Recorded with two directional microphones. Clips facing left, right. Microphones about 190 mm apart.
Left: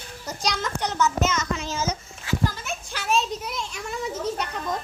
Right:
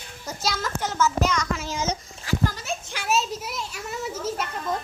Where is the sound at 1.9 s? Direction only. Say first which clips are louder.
Right 1 dB; 40° right (ahead or behind).